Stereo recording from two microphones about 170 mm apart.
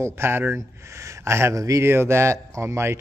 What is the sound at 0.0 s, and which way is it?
Speech, 15° right (ahead or behind).